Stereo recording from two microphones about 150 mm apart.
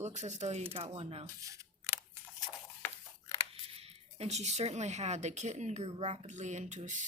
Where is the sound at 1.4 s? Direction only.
20° right (ahead or behind).